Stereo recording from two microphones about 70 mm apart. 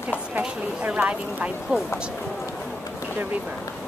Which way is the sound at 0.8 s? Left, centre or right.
Centre.